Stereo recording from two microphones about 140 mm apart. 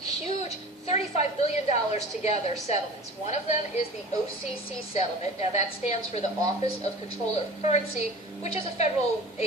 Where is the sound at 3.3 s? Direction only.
55° left (ahead or behind).